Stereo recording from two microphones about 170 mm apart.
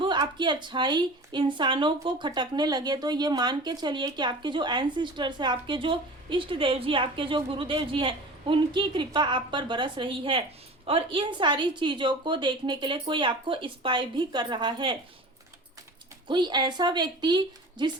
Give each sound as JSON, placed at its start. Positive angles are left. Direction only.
{"t": 0.0, "sound": "a woman's voice", "side_deg": -25}
{"t": 16.2, "sound": "a woman's voice", "side_deg": -25}